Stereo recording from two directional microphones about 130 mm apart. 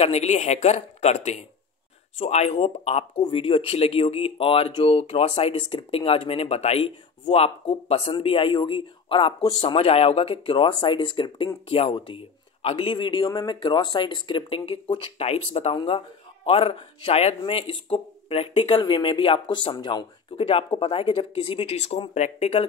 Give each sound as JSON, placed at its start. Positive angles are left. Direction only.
{"t": 0.0, "sound": "speech", "side_deg": 55}
{"t": 15.7, "sound": "speech", "side_deg": 40}